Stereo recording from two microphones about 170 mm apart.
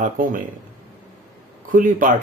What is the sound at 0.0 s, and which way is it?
Speech, 55° right (ahead or behind).